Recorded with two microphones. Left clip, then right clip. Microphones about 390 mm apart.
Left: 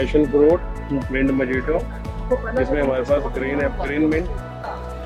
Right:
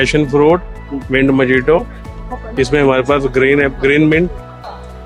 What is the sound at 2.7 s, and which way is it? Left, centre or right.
Speech, right.